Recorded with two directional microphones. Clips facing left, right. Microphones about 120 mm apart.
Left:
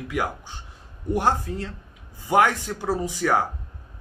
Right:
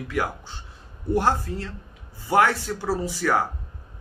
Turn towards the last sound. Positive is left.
turn(degrees=15)  # may be behind; listen again after turning